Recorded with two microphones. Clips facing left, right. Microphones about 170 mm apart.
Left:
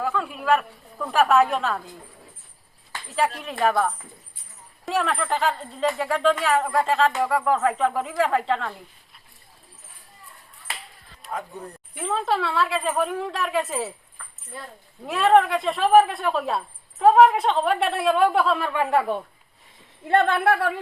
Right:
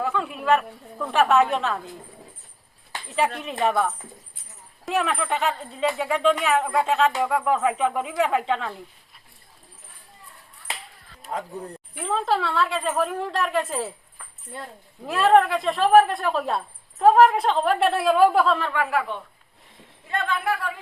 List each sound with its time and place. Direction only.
0.0 s a woman's voice: centre (ahead or behind)
3.6 s a woman's voice: centre (ahead or behind)
4.9 s a woman's voice: centre (ahead or behind)
11.3 s speech: 30° right (ahead or behind)
11.9 s a woman's voice: centre (ahead or behind)
15.0 s a woman's voice: centre (ahead or behind)
18.7 s speech: 25° left (ahead or behind)
20.1 s speech: 60° left (ahead or behind)